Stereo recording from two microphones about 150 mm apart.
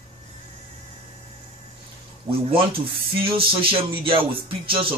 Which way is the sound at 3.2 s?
35° right (ahead or behind).